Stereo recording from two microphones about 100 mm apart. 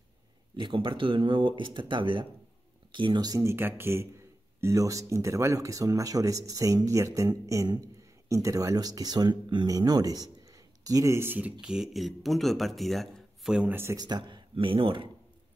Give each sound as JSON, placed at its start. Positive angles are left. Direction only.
{"t": 0.6, "sound": "speech", "side_deg": -55}
{"t": 3.3, "sound": "speech", "side_deg": -25}
{"t": 9.7, "sound": "speech", "side_deg": -40}
{"t": 11.1, "sound": "speech", "side_deg": -20}
{"t": 11.6, "sound": "speech", "side_deg": -5}
{"t": 13.5, "sound": "speech", "side_deg": -10}
{"t": 13.9, "sound": "speech", "side_deg": -45}